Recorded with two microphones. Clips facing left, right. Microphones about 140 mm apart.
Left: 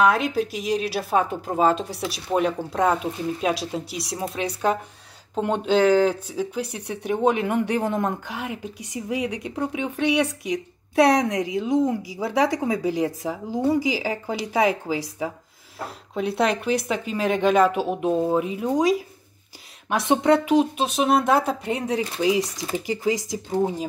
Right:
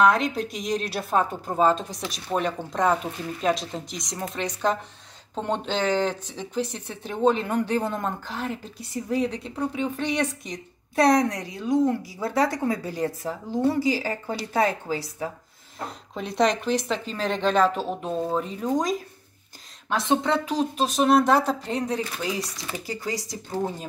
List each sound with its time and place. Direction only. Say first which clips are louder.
0.0 s a woman's voice: left 1 dB; 5° left (ahead or behind)
20.1 s a woman's voice: left 6 dB; 15° left (ahead or behind)
20.8 s a woman's voice: right 1 dB; centre (ahead or behind)